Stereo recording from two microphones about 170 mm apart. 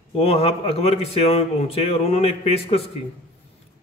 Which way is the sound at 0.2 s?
35° left (ahead or behind).